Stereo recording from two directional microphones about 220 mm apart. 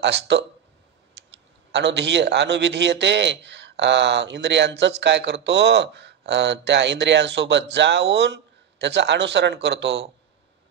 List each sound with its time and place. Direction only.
0.0 s a man's voice: 55° right (ahead or behind)